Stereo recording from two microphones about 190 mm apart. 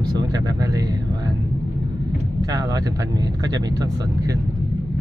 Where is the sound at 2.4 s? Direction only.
20° right (ahead or behind).